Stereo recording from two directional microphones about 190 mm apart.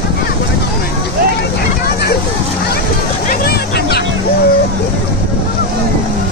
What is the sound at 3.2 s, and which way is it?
Hubbub, 55° left (ahead or behind).